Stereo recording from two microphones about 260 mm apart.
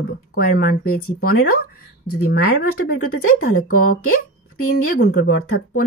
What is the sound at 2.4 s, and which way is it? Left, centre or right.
Speech, left.